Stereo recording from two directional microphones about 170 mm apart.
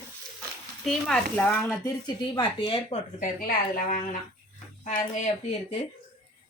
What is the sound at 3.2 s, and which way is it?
Speech, 55° left (ahead or behind).